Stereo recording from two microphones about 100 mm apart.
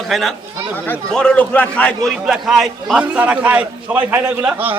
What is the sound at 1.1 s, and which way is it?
Speech, 10° left (ahead or behind).